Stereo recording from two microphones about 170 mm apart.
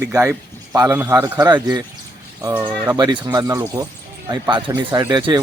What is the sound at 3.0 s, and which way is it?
Speech, 25° right (ahead or behind).